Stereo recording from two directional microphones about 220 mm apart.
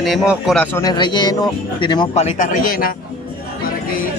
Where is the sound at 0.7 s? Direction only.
15° left (ahead or behind); by 2.9 s 40° left (ahead or behind).